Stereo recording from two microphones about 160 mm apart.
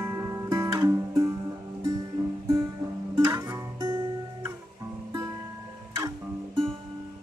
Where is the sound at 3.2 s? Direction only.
20° right (ahead or behind).